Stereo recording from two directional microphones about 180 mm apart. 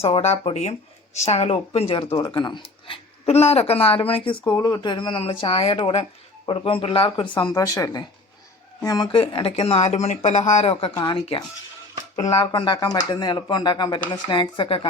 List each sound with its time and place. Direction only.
0.0 s speech: 35° left (ahead or behind)